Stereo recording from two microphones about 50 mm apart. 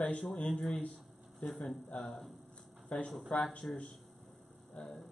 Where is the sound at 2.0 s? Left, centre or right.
Centre.